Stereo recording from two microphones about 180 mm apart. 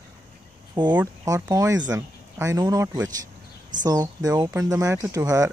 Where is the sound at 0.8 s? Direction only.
25° right (ahead or behind).